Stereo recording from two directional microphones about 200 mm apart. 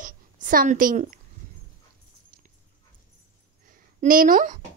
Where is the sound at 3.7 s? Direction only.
45° right (ahead or behind).